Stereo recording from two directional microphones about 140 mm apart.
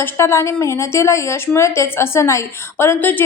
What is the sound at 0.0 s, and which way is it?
A woman's voice, 20° left (ahead or behind).